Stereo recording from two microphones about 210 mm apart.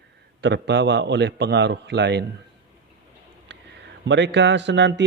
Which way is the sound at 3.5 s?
55° right (ahead or behind).